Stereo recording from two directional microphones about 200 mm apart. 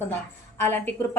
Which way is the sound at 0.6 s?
10° left (ahead or behind).